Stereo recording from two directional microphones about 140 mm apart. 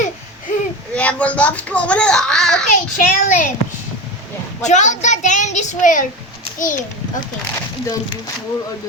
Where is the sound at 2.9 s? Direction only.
80° left.